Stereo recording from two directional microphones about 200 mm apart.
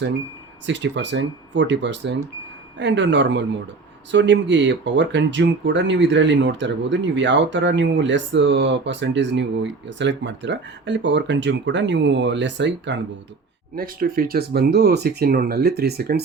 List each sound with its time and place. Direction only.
0.6 s speech: 65° right (ahead or behind)
13.7 s speech: 45° right (ahead or behind)